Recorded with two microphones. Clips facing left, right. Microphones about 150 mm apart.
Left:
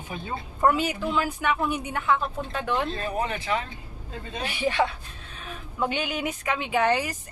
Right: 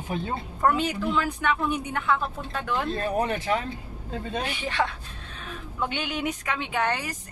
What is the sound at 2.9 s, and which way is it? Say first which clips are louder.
Speech: right 3 dB; 45° right (ahead or behind).